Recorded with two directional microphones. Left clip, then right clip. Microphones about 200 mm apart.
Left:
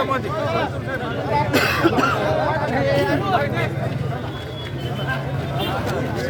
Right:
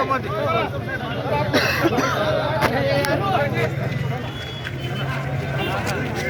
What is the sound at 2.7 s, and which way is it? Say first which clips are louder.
Speech: left 1 dB; 45° right (ahead or behind).